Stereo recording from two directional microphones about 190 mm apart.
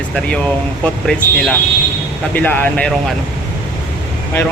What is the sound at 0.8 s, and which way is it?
Speech, 5° left (ahead or behind).